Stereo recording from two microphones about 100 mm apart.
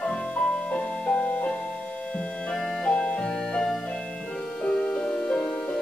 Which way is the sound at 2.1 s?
10° left (ahead or behind).